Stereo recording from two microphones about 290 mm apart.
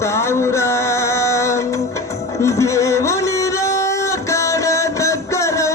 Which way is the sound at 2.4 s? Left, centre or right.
Centre.